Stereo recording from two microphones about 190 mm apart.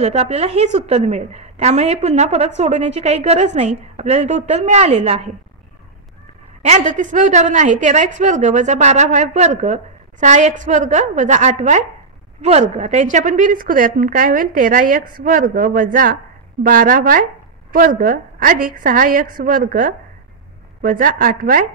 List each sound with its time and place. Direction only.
0.0 s a woman's voice: 35° right (ahead or behind)
6.6 s a woman's voice: 35° right (ahead or behind)